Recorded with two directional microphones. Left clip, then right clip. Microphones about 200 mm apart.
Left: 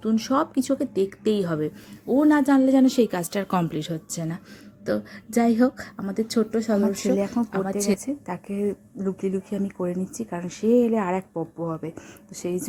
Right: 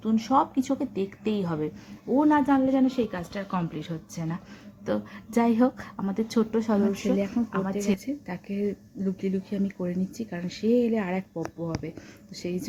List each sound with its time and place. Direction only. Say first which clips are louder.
0.0 s speech: even; 20° left (ahead or behind); by 3.8 s 50° left (ahead or behind)
3.8 s speech: left 6 dB; 30° left (ahead or behind)
4.9 s speech: left 3 dB; 15° left (ahead or behind)